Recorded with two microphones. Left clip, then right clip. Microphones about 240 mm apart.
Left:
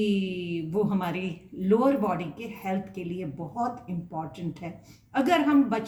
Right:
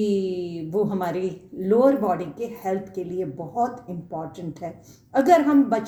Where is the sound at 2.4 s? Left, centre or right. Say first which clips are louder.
Right 6 dB; left.